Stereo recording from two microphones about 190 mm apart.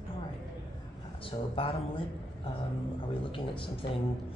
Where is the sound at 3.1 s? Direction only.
30° left (ahead or behind).